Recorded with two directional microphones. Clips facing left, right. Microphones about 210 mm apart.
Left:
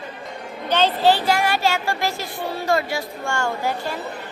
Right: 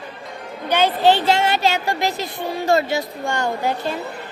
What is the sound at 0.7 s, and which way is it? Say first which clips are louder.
Speech: right 2 dB; 10° right (ahead or behind).